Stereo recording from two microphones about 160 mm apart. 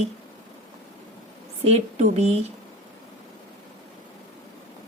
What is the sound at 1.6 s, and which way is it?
Speech, 40° right (ahead or behind).